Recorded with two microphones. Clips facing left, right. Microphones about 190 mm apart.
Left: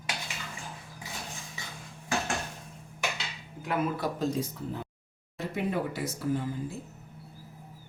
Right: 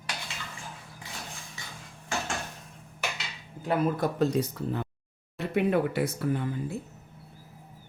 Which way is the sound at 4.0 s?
65° right (ahead or behind).